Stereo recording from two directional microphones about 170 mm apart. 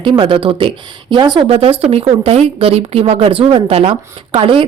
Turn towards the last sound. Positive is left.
turn(degrees=-30)  # may be behind; listen again after turning